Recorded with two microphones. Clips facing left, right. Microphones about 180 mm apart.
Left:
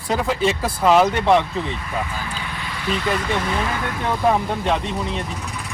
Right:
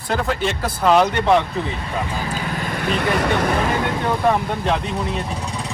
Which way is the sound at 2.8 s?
55° right (ahead or behind).